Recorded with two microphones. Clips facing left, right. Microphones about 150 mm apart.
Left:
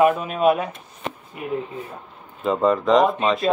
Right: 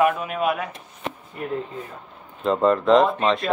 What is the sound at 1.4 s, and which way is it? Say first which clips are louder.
Speech: left 1 dB; 5° left (ahead or behind).